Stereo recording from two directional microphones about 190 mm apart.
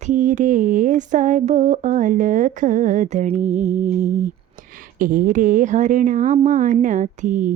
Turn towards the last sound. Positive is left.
turn(degrees=-40)  # may be behind; listen again after turning